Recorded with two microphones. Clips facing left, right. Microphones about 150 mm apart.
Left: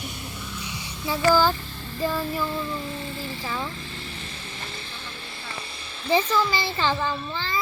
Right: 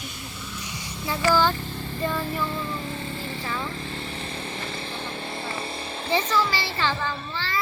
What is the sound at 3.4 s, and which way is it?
Child singing, 20° left (ahead or behind).